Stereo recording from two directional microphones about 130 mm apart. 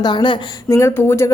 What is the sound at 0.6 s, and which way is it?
Speech, 20° left (ahead or behind).